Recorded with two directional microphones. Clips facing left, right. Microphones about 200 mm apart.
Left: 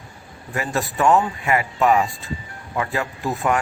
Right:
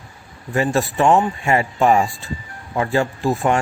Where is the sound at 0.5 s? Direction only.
30° right (ahead or behind).